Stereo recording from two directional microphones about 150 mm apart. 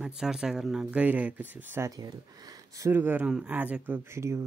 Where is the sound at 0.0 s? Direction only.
5° right (ahead or behind).